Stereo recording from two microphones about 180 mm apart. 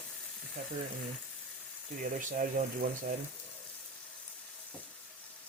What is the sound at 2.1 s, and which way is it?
Speech, 50° right (ahead or behind).